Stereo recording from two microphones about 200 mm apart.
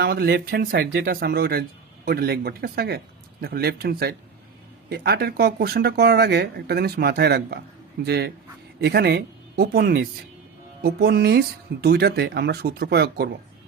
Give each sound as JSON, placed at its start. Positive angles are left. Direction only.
{"t": 0.0, "sound": "speech", "side_deg": -50}